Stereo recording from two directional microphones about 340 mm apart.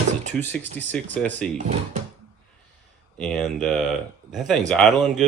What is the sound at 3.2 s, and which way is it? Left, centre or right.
Speech, centre.